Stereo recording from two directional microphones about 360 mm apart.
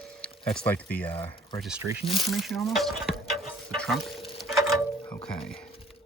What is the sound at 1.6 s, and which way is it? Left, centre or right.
Speech, centre.